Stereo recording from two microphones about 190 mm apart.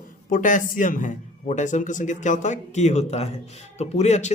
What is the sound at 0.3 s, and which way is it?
Speech, 45° left (ahead or behind).